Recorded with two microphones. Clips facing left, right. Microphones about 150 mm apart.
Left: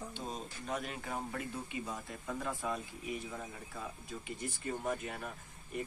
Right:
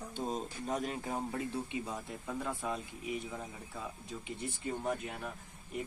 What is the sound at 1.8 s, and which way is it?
Speech, 10° right (ahead or behind).